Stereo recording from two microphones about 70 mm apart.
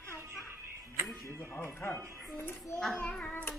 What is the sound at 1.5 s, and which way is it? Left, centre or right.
Speech, left.